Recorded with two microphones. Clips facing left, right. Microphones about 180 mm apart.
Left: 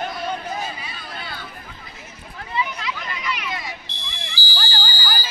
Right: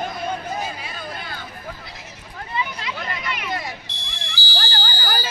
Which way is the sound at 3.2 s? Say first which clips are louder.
Left 1 dB; 55° right (ahead or behind).